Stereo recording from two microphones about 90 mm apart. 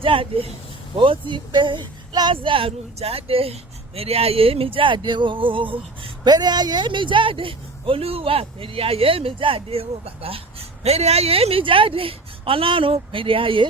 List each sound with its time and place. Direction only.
0.0 s speech: 80° right
0.9 s speech: 65° right (ahead or behind)
2.3 s speech: 80° right
6.2 s speech: 50° right (ahead or behind); by 13.7 s 70° right (ahead or behind)